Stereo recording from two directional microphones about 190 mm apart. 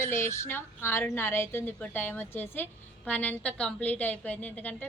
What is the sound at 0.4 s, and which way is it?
A woman's voice, 10° left (ahead or behind).